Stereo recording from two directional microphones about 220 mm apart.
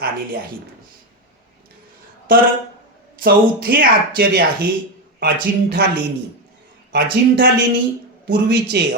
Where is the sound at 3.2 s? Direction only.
45° right (ahead or behind).